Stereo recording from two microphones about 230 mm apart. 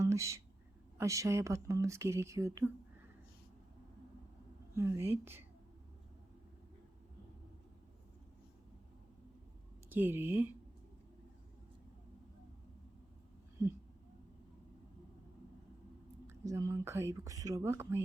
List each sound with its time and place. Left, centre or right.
0.0 s a sound: centre
0.9 s speech: centre
4.7 s speech: centre
9.9 s speech: centre
16.2 s speech: centre